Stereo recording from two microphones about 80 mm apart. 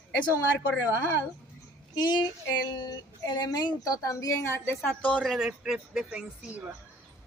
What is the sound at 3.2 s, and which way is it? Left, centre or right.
A woman's voice, left.